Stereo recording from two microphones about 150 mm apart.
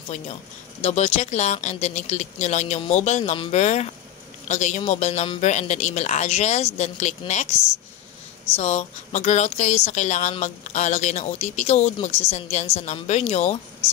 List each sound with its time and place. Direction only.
0.8 s speech: 45° left (ahead or behind)
8.5 s speech: 45° left (ahead or behind)